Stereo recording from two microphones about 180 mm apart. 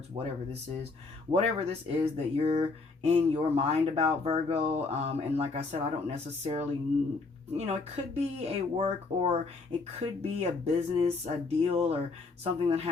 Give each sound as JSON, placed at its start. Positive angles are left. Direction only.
{"t": 0.1, "sound": "speech", "side_deg": -30}